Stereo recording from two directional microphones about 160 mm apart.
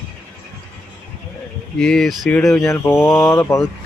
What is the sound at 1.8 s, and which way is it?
Speech, 5° left (ahead or behind).